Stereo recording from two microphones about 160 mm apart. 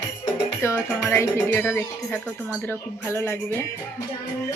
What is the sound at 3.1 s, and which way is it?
Speech, 15° left (ahead or behind).